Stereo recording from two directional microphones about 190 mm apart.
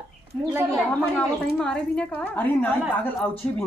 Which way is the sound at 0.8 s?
5° left (ahead or behind).